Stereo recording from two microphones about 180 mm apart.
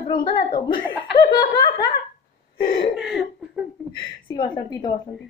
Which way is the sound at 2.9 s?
5° right (ahead or behind).